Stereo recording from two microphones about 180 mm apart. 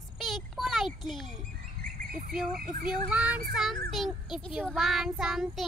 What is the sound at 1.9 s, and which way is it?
Bird, 50° right (ahead or behind).